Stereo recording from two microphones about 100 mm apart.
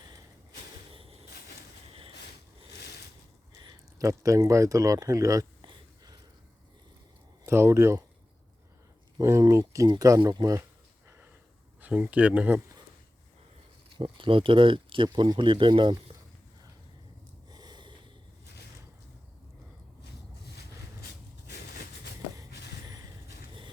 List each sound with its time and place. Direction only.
1.9 s a sound: 70° right (ahead or behind)
3.7 s speech: 35° right (ahead or behind)
7.4 s speech: 25° right (ahead or behind)
9.1 s speech: 35° right (ahead or behind)
11.8 s speech: 15° right (ahead or behind)
13.9 s speech: 60° right (ahead or behind)
17.5 s snort: 45° right (ahead or behind)